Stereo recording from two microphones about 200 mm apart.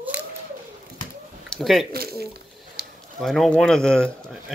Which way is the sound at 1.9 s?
50° right (ahead or behind).